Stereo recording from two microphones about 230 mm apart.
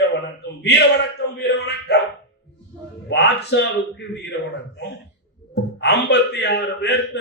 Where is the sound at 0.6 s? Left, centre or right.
Left.